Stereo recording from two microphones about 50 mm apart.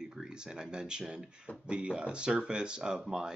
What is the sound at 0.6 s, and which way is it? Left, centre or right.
Speech, centre.